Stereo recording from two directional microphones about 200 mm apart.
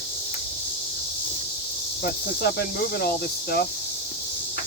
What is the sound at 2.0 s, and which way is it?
Speech, 55° left (ahead or behind).